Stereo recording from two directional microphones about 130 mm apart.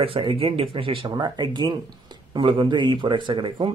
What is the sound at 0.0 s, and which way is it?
Speech, 45° right (ahead or behind).